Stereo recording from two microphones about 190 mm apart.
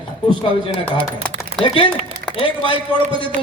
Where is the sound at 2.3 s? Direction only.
25° left (ahead or behind).